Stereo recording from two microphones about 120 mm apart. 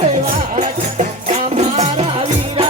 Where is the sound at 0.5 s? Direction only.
70° right (ahead or behind).